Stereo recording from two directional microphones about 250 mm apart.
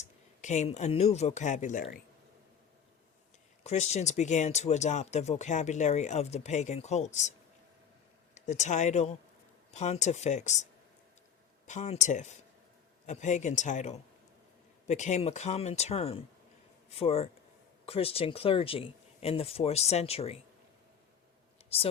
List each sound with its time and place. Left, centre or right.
0.0 s speech: left
3.6 s speech: left
8.4 s speech: left
21.6 s a sound: left